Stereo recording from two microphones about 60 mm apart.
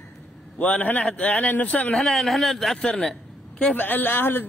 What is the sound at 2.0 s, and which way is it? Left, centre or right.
Speech, centre.